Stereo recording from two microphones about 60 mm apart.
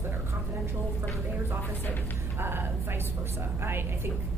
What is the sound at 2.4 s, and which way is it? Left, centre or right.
A woman's voice, right.